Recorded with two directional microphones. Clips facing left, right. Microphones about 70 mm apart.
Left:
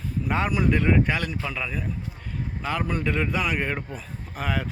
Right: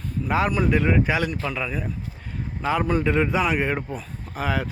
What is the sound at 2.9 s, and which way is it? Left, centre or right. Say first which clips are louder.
Speech: right 5 dB; right.